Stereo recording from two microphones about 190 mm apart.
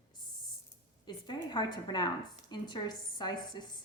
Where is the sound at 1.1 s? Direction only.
25° left (ahead or behind).